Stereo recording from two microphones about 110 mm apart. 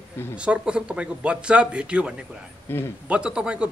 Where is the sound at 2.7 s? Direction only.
20° left (ahead or behind).